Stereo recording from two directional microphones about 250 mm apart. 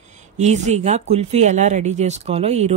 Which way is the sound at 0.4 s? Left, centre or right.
Right.